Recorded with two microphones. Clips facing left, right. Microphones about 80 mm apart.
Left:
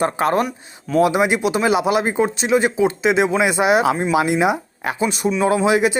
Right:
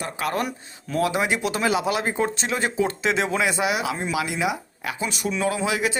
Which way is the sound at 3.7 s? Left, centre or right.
Left.